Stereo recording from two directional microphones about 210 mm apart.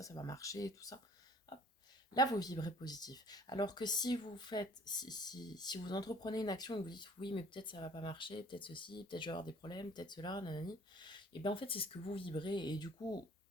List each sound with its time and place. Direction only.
0.0 s speech: 15° left (ahead or behind)
2.1 s speech: 20° left (ahead or behind)